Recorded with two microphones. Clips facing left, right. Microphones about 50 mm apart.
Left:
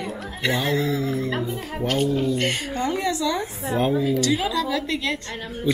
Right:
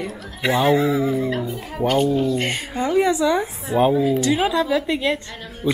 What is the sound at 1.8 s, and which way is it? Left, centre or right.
Speech, centre.